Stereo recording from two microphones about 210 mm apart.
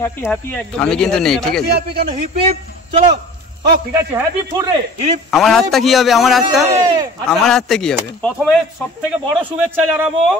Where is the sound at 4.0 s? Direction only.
15° right (ahead or behind).